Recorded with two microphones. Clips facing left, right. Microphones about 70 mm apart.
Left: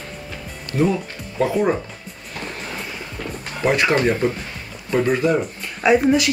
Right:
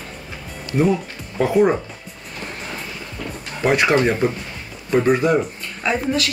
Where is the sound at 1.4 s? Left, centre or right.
Centre.